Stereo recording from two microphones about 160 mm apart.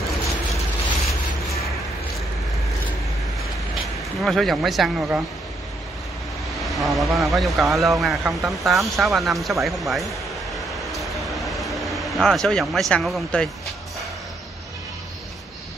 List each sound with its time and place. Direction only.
4.2 s speech: centre (ahead or behind)
6.6 s speech: centre (ahead or behind)
8.2 s speech: 15° right (ahead or behind)
8.5 s speech: centre (ahead or behind)
10.9 s a sound: centre (ahead or behind)